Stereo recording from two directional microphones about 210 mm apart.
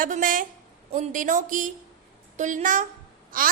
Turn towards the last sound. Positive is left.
turn(degrees=-40)  # may be behind; listen again after turning